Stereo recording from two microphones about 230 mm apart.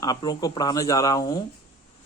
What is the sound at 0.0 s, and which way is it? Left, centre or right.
Speech, centre.